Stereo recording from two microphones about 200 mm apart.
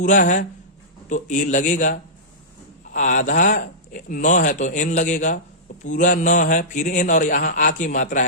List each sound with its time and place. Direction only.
0.0 s speech: 40° left (ahead or behind)